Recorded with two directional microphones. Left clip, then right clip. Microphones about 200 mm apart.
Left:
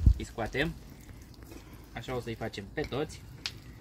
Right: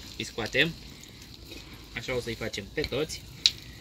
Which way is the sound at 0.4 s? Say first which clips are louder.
Right 6 dB; centre (ahead or behind).